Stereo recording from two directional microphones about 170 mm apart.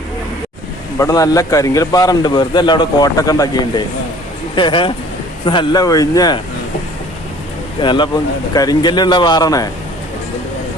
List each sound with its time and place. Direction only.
0.9 s a man's voice: 20° left (ahead or behind)
7.8 s a man's voice: 30° left (ahead or behind)